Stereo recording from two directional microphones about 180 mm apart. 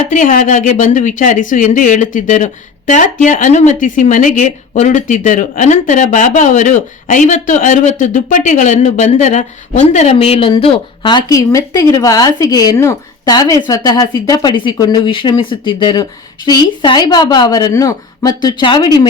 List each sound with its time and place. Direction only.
0.1 s speech: 45° left (ahead or behind); by 19.0 s 20° left (ahead or behind)